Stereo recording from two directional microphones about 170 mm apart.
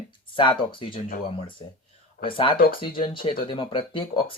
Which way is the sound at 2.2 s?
30° left (ahead or behind).